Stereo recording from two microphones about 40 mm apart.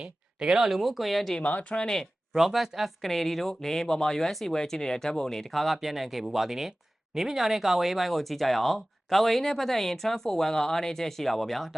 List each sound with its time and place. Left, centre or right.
0.0 s speech: centre
0.8 s speech: centre
1.4 s speech: left
1.8 s speech: centre
2.3 s speech: centre
3.0 s speech: centre
5.5 s speech: centre